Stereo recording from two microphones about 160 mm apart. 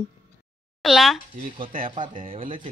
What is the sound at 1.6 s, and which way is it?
Speech, 60° right (ahead or behind).